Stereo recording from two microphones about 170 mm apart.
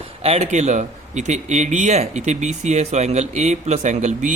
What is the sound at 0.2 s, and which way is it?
A man's voice, 35° right (ahead or behind).